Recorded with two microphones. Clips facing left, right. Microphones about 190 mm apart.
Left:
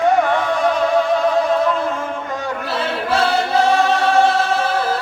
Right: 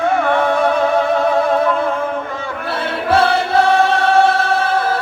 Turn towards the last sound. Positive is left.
turn(degrees=-55)  # may be behind; listen again after turning